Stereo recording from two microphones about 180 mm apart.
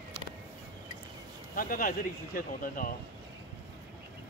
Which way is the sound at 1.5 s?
50° left (ahead or behind).